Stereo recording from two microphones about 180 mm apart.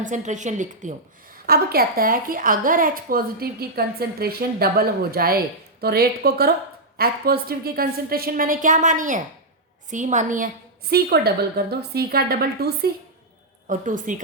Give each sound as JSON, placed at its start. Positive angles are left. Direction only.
{"t": 0.0, "sound": "a woman's voice", "side_deg": -45}
{"t": 13.7, "sound": "a woman's voice", "side_deg": -45}